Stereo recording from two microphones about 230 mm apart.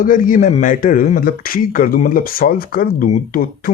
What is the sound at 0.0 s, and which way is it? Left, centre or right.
Speech, left.